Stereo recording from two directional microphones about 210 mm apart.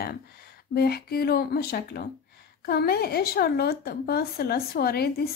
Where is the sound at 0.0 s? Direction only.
45° left (ahead or behind).